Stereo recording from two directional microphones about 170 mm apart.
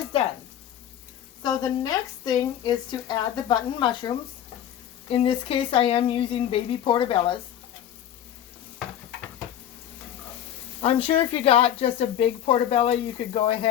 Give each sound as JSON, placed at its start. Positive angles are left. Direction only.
{"t": 1.4, "sound": "speech", "side_deg": 25}
{"t": 10.8, "sound": "speech", "side_deg": 35}